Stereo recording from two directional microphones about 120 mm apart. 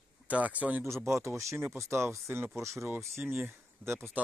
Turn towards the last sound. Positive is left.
turn(degrees=-20)  # may be behind; listen again after turning